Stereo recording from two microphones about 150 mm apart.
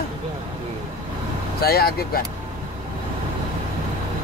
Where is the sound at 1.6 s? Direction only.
90° left.